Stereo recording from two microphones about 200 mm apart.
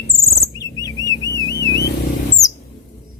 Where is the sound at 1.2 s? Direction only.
60° left (ahead or behind).